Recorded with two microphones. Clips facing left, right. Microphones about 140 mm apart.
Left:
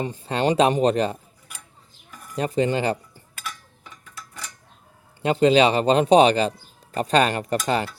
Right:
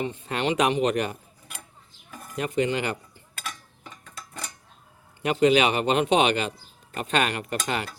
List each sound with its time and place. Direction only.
0.0 s speech: 35° left (ahead or behind)
2.3 s speech: 35° left (ahead or behind)
3.4 s a sound: 25° right (ahead or behind)
5.2 s speech: 30° left (ahead or behind)